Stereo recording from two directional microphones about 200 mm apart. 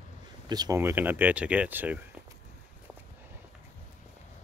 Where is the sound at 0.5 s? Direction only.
15° right (ahead or behind).